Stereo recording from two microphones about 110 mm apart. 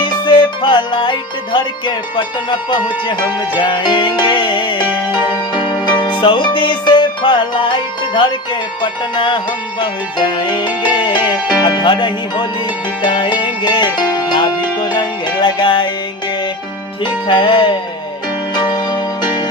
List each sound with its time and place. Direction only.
0.0 s music: 45° left (ahead or behind)
17.0 s music: 50° left (ahead or behind)